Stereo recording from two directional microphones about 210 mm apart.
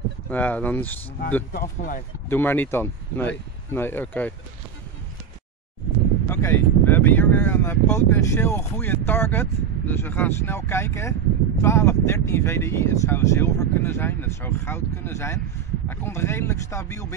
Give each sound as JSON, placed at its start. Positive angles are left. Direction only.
{"t": 0.3, "sound": "speech", "side_deg": 5}
{"t": 1.5, "sound": "speech", "side_deg": 40}
{"t": 2.2, "sound": "speech", "side_deg": 10}
{"t": 6.2, "sound": "speech", "side_deg": 10}